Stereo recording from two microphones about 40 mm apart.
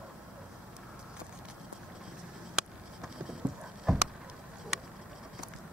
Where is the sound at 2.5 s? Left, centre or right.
Centre.